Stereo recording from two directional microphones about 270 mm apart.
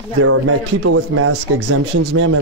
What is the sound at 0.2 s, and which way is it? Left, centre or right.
Speech, right.